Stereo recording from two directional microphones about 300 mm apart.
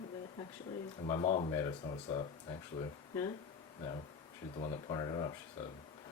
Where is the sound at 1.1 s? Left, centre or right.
Centre.